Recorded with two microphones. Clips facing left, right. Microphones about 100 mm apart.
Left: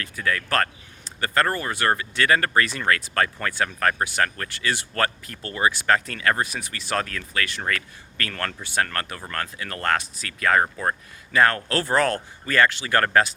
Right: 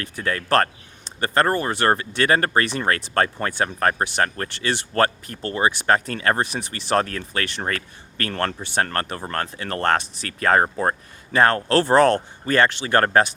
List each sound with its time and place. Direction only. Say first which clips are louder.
0.0 s speech: even; 30° right (ahead or behind)